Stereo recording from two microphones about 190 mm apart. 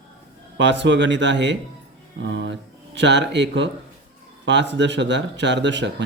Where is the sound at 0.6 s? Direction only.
70° right (ahead or behind).